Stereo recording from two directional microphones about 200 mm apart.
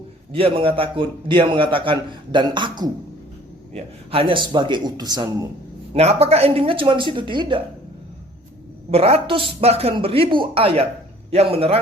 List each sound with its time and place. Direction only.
0.3 s a man's voice: 30° right (ahead or behind)
5.9 s a man's voice: 30° right (ahead or behind)
8.9 s a man's voice: 30° right (ahead or behind)